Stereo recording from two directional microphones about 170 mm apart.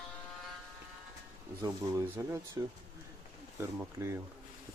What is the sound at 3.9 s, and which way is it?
Speech, 15° right (ahead or behind).